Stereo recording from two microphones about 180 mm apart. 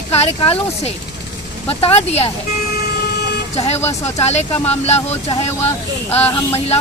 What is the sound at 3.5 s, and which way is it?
Speech, 35° left (ahead or behind).